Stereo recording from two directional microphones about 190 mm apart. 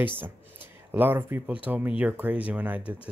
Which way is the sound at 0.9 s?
10° right (ahead or behind).